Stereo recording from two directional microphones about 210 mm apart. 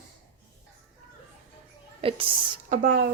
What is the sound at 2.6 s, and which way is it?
Speech, 40° right (ahead or behind).